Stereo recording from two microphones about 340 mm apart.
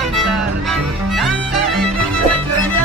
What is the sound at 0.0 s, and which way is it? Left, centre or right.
Music, centre.